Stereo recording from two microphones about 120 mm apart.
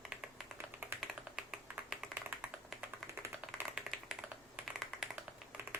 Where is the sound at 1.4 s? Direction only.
5° right (ahead or behind).